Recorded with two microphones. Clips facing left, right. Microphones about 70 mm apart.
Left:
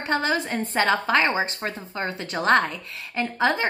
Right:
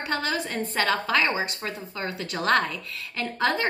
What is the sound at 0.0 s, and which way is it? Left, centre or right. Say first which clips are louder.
A woman's voice: left 4 dB; left.